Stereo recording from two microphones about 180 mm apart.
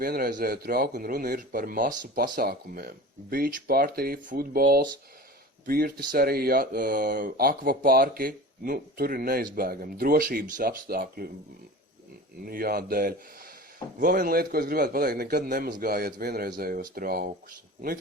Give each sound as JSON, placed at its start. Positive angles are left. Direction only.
{"t": 0.0, "sound": "a man's voice", "side_deg": -55}
{"t": 12.5, "sound": "a man's voice", "side_deg": -55}